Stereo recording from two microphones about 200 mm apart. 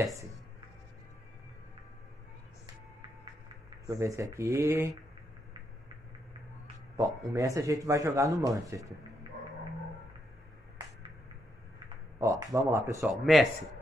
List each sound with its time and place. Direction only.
3.8 s speech: 15° right (ahead or behind)
7.0 s speech: 15° right (ahead or behind)
12.2 s speech: 15° right (ahead or behind)
13.0 s speech: centre (ahead or behind)